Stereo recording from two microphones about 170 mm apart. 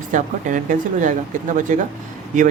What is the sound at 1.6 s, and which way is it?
Speech, 50° right (ahead or behind).